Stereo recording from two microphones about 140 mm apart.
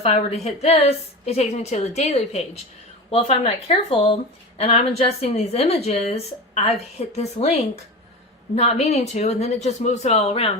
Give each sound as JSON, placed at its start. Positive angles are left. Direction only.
{"t": 0.0, "sound": "speech", "side_deg": 45}